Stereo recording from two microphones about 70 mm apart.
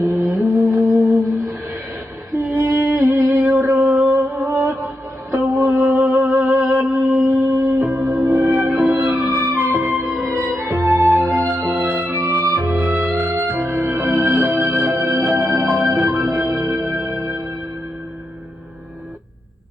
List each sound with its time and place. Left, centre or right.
0.0 s music: right
2.4 s music: right
8.6 s music: right
12.1 s music: right
12.7 s music: right